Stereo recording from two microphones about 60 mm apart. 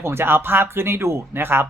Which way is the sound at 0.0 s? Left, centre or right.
Right.